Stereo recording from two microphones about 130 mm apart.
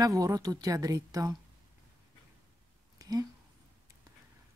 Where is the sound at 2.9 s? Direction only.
30° right (ahead or behind).